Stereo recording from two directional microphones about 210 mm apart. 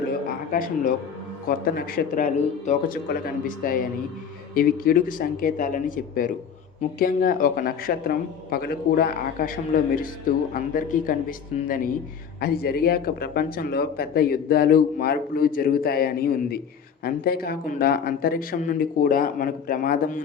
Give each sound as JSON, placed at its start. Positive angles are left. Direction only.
{"t": 1.5, "sound": "speech", "side_deg": 45}